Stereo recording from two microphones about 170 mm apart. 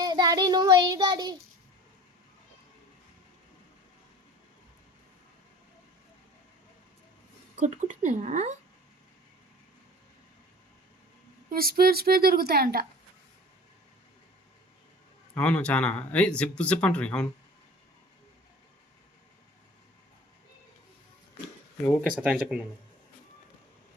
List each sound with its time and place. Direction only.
0.0 s child singing: 25° right (ahead or behind)
7.6 s speech: 45° right (ahead or behind)
11.5 s a woman's voice: 60° right (ahead or behind)
15.4 s speech: 5° left (ahead or behind)
22.2 s speech: 5° right (ahead or behind)